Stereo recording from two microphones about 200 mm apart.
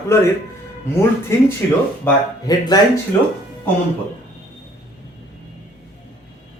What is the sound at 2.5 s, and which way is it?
Speech, 20° left (ahead or behind).